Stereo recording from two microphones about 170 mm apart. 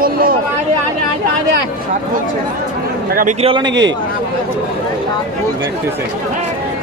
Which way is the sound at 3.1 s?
55° right (ahead or behind).